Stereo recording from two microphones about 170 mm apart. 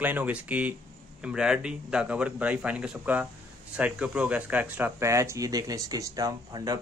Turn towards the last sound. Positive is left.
turn(degrees=-20)  # may be behind; listen again after turning